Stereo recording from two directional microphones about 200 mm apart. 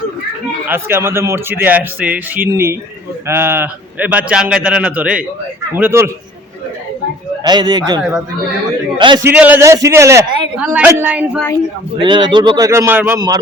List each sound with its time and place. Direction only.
0.7 s a man's voice: 10° right (ahead or behind)
7.4 s a man's voice: 20° right (ahead or behind)
9.2 s a man's voice: 10° right (ahead or behind)
11.9 s a man's voice: 25° right (ahead or behind)